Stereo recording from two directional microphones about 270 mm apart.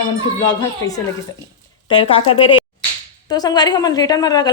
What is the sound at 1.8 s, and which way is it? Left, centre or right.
A woman's voice, centre.